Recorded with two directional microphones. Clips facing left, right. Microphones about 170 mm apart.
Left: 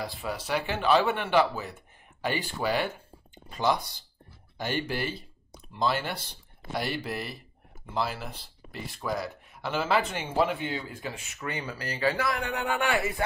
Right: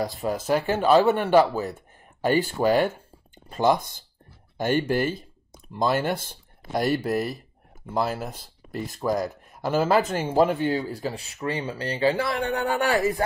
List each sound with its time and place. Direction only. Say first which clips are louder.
0.0 s speech: right 7 dB; 45° right (ahead or behind)